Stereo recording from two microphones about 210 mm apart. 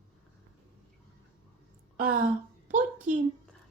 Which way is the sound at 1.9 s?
45° right (ahead or behind).